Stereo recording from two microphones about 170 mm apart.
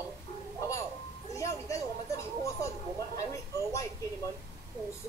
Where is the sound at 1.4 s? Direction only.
20° left (ahead or behind).